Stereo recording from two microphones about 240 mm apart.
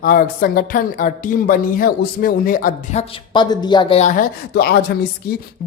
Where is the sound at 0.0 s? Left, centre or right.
Left.